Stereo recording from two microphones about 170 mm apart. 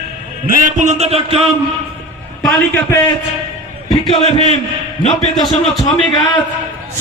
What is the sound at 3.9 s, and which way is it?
Speech, 30° left (ahead or behind).